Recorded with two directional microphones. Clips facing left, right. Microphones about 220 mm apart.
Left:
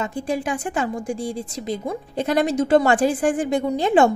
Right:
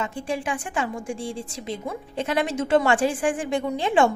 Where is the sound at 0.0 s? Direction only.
40° left (ahead or behind).